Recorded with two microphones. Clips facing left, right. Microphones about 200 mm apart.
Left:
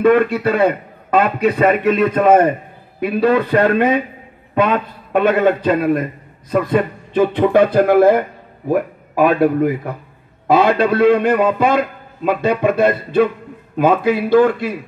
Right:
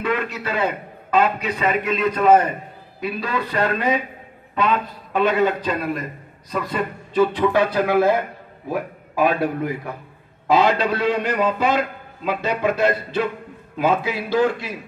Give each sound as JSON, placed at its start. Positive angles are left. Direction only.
{"t": 0.0, "sound": "a man's voice", "side_deg": 55}